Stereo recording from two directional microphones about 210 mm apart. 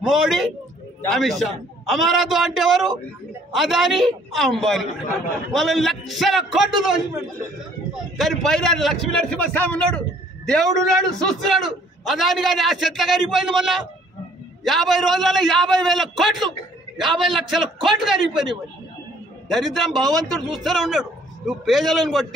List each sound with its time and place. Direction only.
0.0 s a man's voice: centre (ahead or behind)
7.9 s a man's voice: centre (ahead or behind)